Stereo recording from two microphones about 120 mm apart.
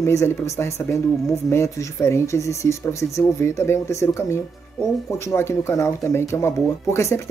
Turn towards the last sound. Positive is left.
turn(degrees=20)  # may be behind; listen again after turning